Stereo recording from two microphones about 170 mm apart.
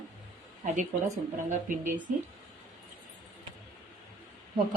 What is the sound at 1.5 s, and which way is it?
Speech, 50° right (ahead or behind).